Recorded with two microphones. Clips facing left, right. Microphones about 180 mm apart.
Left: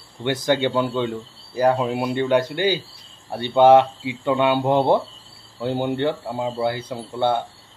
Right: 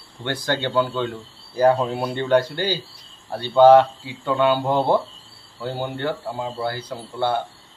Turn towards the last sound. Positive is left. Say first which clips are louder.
# left 2 dB
turn(degrees=20)  # may be behind; listen again after turning